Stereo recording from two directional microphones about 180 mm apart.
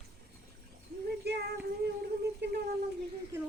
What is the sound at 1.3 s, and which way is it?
Child singing, 65° right (ahead or behind).